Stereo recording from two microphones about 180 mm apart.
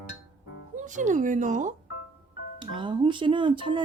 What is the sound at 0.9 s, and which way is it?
Speech, 45° right (ahead or behind).